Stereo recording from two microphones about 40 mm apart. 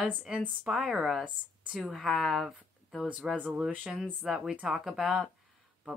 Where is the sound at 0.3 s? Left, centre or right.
Centre.